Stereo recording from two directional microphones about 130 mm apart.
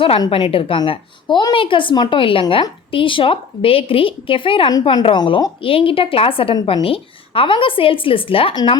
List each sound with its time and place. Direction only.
0.3 s a woman's voice: 45° left (ahead or behind)